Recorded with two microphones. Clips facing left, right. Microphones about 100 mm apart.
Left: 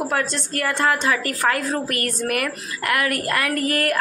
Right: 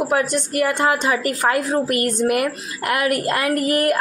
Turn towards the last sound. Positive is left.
turn(degrees=-20)  # may be behind; listen again after turning